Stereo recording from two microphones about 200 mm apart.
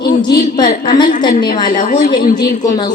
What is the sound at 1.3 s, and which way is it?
Speech, 45° left (ahead or behind).